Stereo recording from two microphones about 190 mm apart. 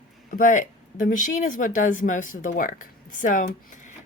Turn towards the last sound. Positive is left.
turn(degrees=40)  # may be behind; listen again after turning